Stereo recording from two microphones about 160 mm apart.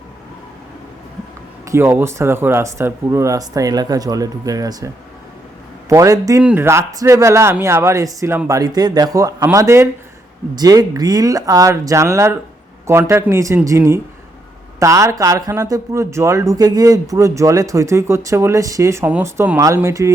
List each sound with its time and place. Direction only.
1.6 s speech: 15° right (ahead or behind)
5.9 s speech: 20° right (ahead or behind)